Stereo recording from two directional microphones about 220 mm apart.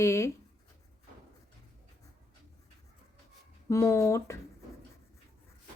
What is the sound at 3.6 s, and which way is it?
Speech, 15° left (ahead or behind).